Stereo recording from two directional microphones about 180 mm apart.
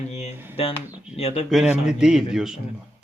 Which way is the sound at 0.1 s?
40° left (ahead or behind).